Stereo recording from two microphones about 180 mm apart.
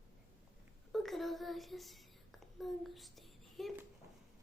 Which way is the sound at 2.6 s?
Centre (ahead or behind).